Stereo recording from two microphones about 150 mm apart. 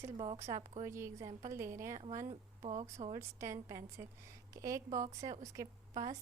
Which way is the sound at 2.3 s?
50° right (ahead or behind).